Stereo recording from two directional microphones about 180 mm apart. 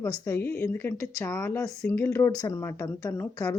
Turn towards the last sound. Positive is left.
turn(degrees=15)  # may be behind; listen again after turning